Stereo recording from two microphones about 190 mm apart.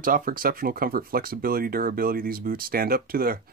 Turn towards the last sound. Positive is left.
turn(degrees=-50)  # may be behind; listen again after turning